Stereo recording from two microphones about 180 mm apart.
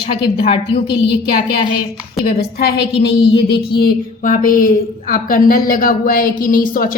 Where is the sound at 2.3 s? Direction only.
60° left (ahead or behind).